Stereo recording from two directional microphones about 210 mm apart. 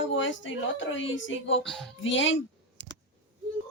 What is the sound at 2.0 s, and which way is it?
Speech, 65° left (ahead or behind).